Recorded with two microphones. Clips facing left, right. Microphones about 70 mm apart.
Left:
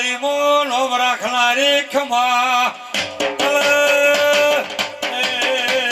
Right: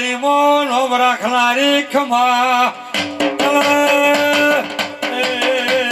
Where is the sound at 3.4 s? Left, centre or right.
Right.